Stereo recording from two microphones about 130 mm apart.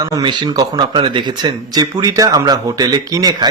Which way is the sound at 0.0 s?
30° right (ahead or behind).